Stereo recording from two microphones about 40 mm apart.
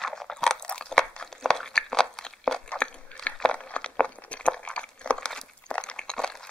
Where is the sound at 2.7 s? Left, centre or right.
Left.